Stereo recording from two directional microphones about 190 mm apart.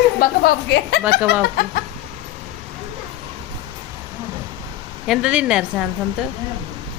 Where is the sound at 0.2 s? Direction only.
55° left (ahead or behind).